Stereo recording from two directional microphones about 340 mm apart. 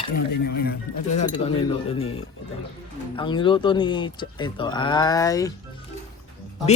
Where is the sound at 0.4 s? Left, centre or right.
Left.